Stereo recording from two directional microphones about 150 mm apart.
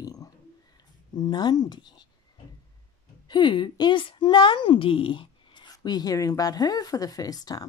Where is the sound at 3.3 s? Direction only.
35° left (ahead or behind).